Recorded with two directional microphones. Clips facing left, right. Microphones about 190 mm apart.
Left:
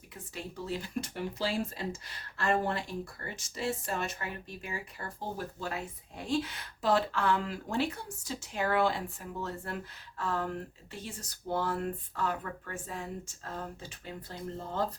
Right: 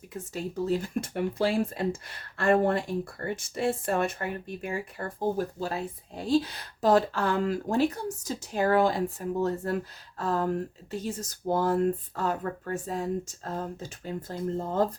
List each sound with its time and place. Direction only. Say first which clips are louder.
0.1 s speech: right 8 dB; 45° right (ahead or behind)